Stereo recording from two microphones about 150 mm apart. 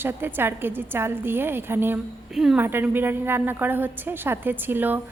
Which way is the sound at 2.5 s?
15° right (ahead or behind).